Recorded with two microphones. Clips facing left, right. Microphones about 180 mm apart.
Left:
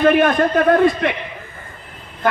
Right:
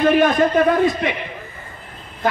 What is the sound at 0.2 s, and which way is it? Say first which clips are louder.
Speech: even; 60° left (ahead or behind).